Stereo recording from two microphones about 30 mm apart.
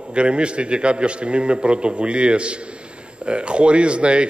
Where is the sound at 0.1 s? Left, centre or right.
Right.